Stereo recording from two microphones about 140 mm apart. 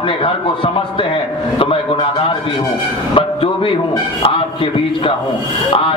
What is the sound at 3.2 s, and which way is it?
Speech, 40° left (ahead or behind).